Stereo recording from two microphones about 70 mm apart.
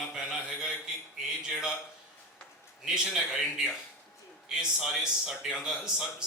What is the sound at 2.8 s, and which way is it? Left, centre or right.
A man's voice, centre.